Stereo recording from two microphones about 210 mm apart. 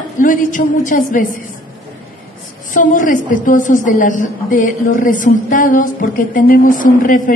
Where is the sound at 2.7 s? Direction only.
40° left (ahead or behind).